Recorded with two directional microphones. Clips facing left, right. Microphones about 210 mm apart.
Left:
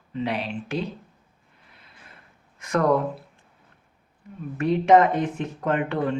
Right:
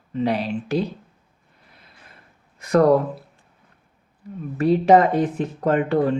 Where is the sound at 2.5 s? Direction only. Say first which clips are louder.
Right 6 dB; 35° right (ahead or behind).